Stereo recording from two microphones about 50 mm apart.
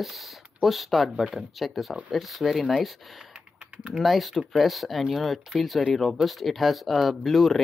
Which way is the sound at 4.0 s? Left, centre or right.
Centre.